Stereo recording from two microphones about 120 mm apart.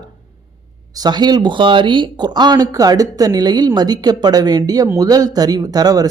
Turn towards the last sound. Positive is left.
turn(degrees=-35)  # may be behind; listen again after turning